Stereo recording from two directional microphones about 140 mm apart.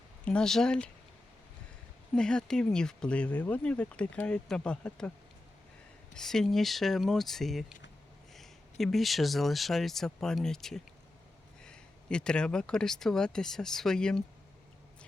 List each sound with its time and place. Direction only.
0.3 s speech: 5° left (ahead or behind)
2.1 s speech: 5° left (ahead or behind)
6.1 s speech: 5° left (ahead or behind)